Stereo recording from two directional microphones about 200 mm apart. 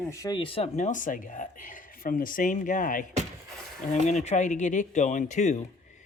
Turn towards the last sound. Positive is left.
turn(degrees=35)  # may be behind; listen again after turning